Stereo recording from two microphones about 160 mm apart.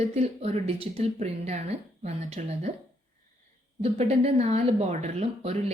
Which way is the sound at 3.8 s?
40° right (ahead or behind).